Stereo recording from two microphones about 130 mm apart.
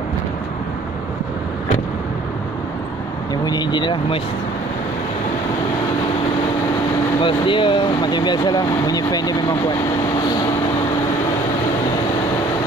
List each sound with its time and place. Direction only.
3.4 s speech: 35° left (ahead or behind)
7.2 s speech: 40° left (ahead or behind)